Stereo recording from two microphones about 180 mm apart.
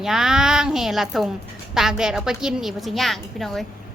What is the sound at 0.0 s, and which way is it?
A woman's voice, centre (ahead or behind).